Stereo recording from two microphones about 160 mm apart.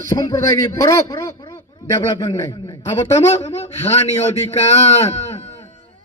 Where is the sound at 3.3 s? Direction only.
40° left (ahead or behind).